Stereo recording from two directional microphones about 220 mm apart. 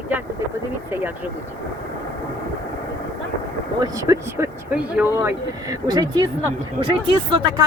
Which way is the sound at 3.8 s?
15° right (ahead or behind).